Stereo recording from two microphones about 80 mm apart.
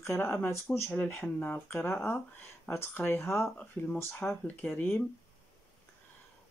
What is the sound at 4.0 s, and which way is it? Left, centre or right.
Speech, left.